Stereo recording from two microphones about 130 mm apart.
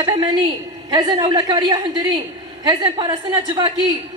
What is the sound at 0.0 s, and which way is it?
A woman's voice, 35° right (ahead or behind).